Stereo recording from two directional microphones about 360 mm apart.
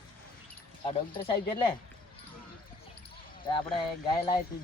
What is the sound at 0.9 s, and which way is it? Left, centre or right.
Speech, centre.